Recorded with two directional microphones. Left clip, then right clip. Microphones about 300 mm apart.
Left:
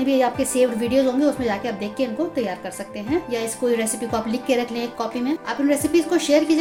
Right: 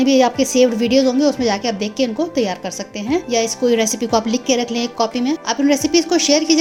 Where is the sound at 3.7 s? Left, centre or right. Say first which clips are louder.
Right 5 dB; right.